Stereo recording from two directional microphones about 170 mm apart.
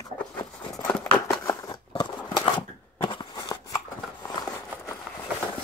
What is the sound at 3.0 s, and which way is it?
Scissors, 25° left (ahead or behind).